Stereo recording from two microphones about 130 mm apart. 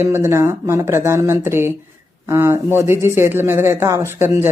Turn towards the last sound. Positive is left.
turn(degrees=-20)  # may be behind; listen again after turning